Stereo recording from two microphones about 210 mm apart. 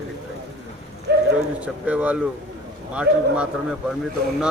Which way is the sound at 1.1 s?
50° right (ahead or behind).